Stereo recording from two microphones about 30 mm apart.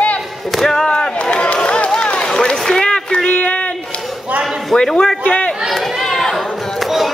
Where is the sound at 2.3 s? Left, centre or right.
Left.